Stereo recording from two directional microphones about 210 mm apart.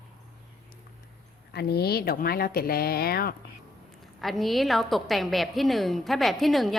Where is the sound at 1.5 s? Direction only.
50° left (ahead or behind).